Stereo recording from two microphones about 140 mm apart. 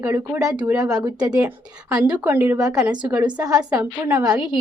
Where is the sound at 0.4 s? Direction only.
30° right (ahead or behind).